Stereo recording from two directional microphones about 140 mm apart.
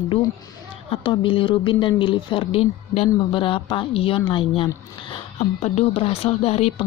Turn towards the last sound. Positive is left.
turn(degrees=45)  # may be behind; listen again after turning